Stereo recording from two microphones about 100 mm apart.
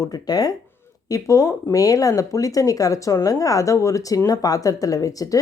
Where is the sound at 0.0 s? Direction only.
40° left (ahead or behind).